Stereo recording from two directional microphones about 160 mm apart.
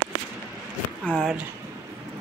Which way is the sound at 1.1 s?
5° left (ahead or behind).